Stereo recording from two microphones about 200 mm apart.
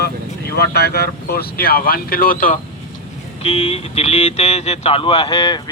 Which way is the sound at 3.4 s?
30° left (ahead or behind).